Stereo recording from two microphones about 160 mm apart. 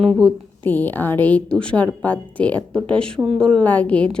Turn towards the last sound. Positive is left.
turn(degrees=10)  # may be behind; listen again after turning